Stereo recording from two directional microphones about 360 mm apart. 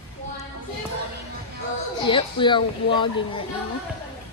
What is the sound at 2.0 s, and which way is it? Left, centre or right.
A woman's voice, centre.